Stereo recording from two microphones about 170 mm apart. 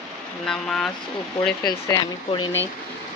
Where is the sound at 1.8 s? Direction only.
25° left (ahead or behind).